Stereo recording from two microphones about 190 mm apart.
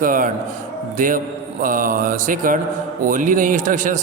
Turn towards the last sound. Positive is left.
turn(degrees=-40)  # may be behind; listen again after turning